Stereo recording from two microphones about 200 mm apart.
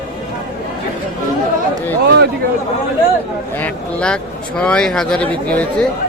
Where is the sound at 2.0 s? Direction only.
55° right (ahead or behind).